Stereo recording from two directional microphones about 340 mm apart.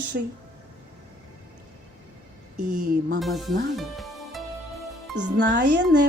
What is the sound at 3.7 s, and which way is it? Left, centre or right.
Music, centre.